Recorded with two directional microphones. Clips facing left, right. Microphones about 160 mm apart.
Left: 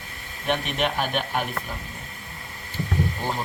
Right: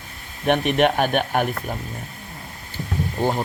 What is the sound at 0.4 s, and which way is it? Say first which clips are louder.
A man's voice: right 7 dB; 55° right (ahead or behind).